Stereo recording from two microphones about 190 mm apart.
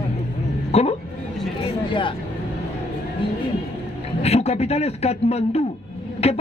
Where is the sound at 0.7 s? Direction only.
35° left (ahead or behind).